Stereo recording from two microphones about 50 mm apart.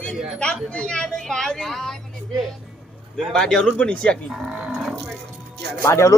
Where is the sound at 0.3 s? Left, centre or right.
Centre.